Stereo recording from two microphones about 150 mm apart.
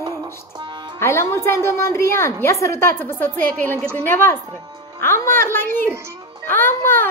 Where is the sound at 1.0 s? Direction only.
15° left (ahead or behind).